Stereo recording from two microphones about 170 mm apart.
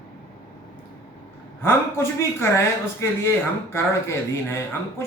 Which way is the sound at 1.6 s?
15° left (ahead or behind).